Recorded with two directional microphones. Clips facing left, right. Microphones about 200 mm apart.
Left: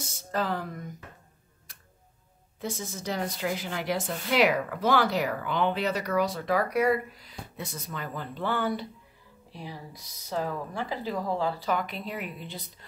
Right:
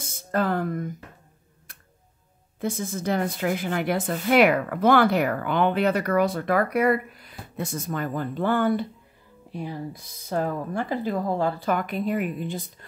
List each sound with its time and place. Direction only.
0.0 s speech: 55° right (ahead or behind)
1.7 s tick-tock: 55° right (ahead or behind)
2.6 s speech: 55° right (ahead or behind)